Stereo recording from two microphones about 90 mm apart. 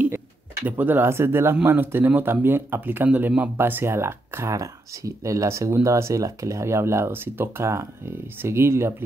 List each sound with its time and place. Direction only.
0.7 s speech: 20° right (ahead or behind)